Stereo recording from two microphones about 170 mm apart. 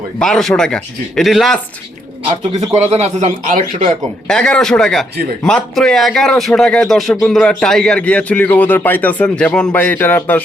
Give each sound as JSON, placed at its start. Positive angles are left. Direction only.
{"t": 0.2, "sound": "speech", "side_deg": 0}
{"t": 2.9, "sound": "speech", "side_deg": -40}
{"t": 4.3, "sound": "a man's voice", "side_deg": 5}